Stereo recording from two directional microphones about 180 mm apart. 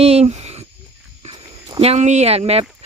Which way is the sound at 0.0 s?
35° right (ahead or behind).